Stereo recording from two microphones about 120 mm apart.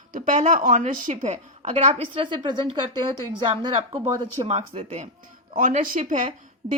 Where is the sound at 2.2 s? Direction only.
40° right (ahead or behind).